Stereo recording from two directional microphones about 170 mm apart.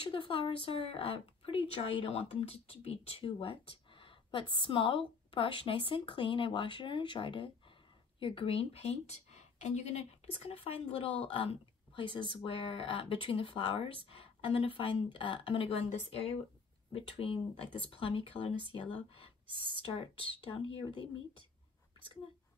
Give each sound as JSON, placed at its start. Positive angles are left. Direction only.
{"t": 0.0, "sound": "a woman's voice", "side_deg": 30}
{"t": 19.4, "sound": "speech", "side_deg": -30}
{"t": 19.8, "sound": "speech", "side_deg": 30}